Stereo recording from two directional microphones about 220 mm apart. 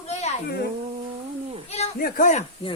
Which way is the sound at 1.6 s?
30° left (ahead or behind).